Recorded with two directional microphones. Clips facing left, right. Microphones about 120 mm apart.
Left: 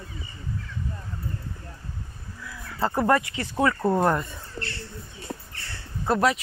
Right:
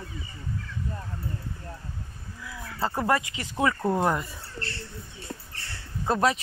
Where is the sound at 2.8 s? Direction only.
15° left (ahead or behind).